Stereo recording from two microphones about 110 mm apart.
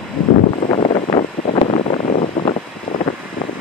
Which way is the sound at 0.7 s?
75° left (ahead or behind).